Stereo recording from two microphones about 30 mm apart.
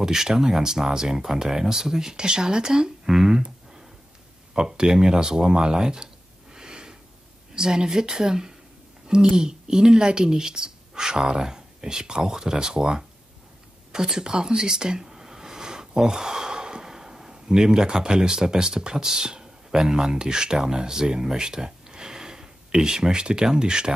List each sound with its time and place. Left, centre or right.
0.0 s speech: centre
6.5 s a sound: right
7.5 s speech: right